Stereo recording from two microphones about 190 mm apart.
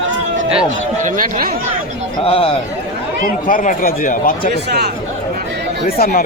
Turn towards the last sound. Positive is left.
turn(degrees=50)  # may be behind; listen again after turning